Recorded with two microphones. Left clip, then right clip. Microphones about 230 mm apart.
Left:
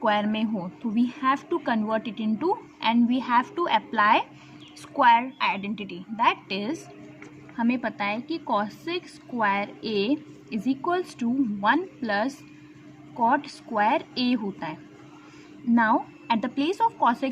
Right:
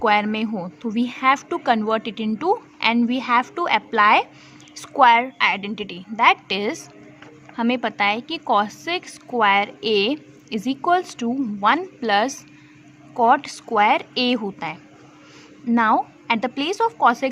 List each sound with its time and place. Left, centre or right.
0.0 s a woman's voice: right